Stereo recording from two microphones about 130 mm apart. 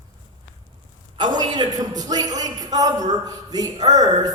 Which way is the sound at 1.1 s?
35° right (ahead or behind).